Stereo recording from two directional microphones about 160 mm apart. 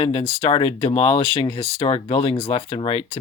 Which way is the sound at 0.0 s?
35° left (ahead or behind).